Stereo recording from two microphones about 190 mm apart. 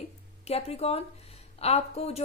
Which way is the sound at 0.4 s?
35° left (ahead or behind).